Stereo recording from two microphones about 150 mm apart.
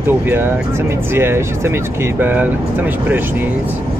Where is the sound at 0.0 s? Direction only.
15° right (ahead or behind).